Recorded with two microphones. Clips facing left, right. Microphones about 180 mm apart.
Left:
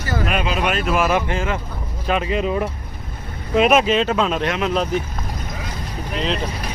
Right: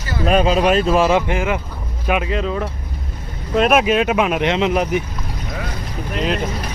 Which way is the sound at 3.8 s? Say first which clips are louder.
Right 2 dB; 10° right (ahead or behind).